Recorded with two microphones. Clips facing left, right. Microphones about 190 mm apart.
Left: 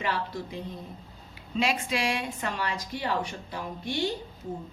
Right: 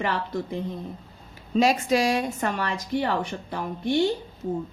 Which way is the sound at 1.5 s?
40° right (ahead or behind).